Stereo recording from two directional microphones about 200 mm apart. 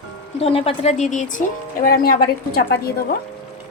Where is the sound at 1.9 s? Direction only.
50° left (ahead or behind).